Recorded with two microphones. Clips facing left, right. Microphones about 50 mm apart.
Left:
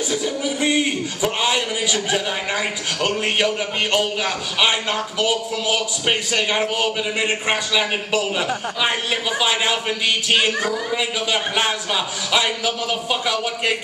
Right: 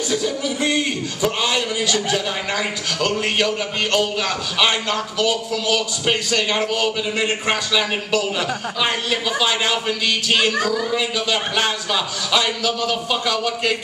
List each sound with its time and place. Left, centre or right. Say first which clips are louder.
0.1 s a man's voice: right 1 dB; centre